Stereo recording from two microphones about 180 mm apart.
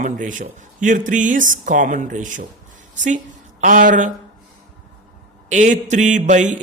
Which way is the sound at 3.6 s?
45° right (ahead or behind).